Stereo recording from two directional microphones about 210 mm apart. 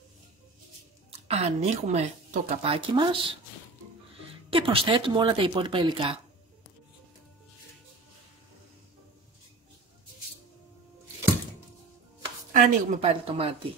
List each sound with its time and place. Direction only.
1.2 s a woman's voice: 30° right (ahead or behind)
4.5 s speech: 25° right (ahead or behind)
12.5 s speech: 30° right (ahead or behind)